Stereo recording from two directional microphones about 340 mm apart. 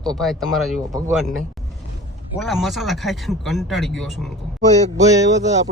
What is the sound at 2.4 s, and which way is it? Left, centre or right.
Speech, centre.